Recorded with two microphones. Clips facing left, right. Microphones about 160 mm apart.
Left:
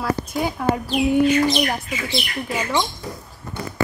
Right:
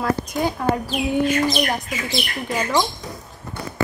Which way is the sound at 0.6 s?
5° left (ahead or behind).